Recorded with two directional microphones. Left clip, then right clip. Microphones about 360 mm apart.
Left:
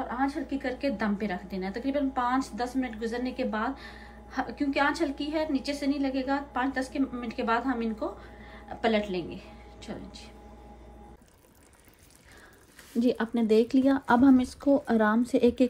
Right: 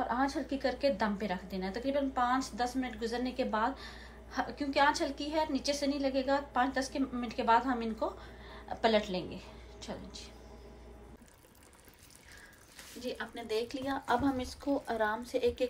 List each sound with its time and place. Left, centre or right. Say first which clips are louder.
0.5 s a woman's voice: even; centre
13.0 s speech: left 12 dB; centre